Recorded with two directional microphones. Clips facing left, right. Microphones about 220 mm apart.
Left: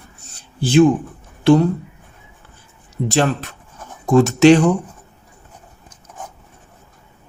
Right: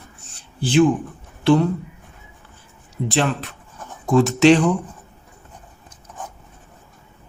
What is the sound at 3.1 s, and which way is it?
Speech, 45° left (ahead or behind).